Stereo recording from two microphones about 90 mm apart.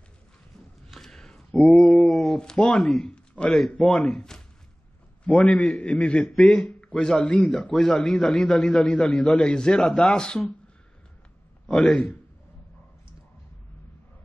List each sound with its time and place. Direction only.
0.9 s a sound: 5° left (ahead or behind)
1.7 s a man's voice: centre (ahead or behind)
5.2 s a man's voice: 15° left (ahead or behind)
6.2 s a man's voice: centre (ahead or behind)
11.6 s a man's voice: 5° left (ahead or behind)